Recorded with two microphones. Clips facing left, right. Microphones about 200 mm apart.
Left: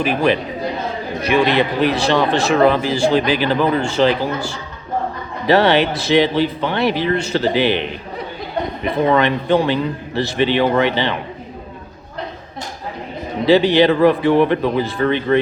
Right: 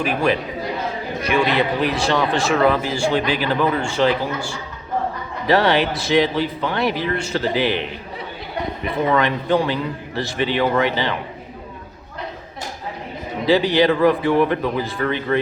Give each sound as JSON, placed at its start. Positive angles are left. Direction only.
{"t": 0.0, "sound": "speech", "side_deg": 30}
{"t": 1.5, "sound": "speech", "side_deg": 30}
{"t": 5.5, "sound": "speech", "side_deg": 30}
{"t": 9.0, "sound": "speech", "side_deg": 30}
{"t": 13.4, "sound": "speech", "side_deg": 25}